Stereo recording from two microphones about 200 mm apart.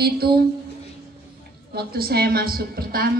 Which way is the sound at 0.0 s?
50° right (ahead or behind).